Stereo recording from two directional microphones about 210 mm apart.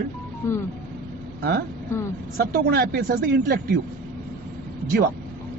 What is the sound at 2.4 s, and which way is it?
A man's voice, 50° right (ahead or behind).